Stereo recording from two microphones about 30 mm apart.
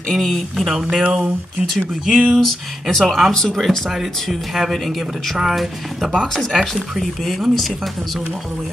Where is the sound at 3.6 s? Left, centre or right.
Centre.